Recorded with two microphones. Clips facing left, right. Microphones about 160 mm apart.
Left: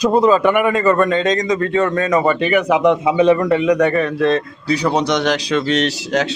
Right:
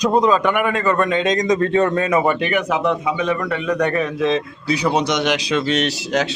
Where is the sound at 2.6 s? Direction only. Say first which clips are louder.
Left 5 dB; 15° left (ahead or behind).